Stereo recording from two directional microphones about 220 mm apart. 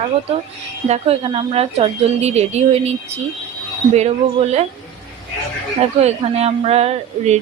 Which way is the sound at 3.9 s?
30° right (ahead or behind).